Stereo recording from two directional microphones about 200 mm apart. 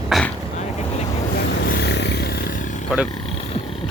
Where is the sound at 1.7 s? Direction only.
55° left (ahead or behind); by 2.8 s 40° left (ahead or behind).